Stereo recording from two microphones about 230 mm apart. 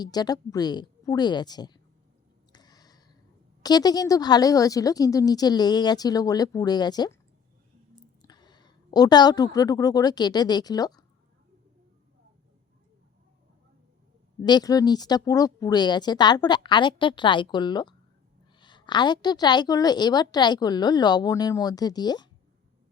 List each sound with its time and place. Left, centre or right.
0.0 s a woman's voice: centre
2.5 s a sound: centre
3.6 s a woman's voice: centre
8.3 s a woman's voice: centre
14.4 s a woman's voice: centre